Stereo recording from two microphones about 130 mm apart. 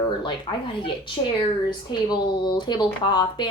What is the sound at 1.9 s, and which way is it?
Speech, 35° left (ahead or behind).